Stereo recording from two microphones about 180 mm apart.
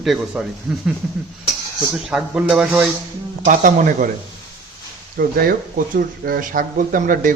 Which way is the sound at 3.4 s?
45° right (ahead or behind).